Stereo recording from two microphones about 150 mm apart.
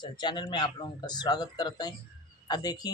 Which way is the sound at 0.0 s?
30° left (ahead or behind).